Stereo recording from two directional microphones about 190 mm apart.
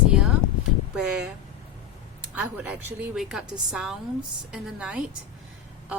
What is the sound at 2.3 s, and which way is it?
A woman's voice, 10° right (ahead or behind).